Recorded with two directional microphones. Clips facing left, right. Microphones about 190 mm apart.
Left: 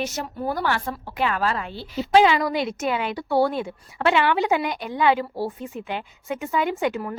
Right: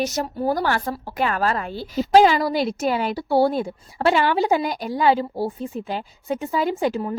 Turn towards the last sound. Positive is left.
turn(degrees=-30)  # may be behind; listen again after turning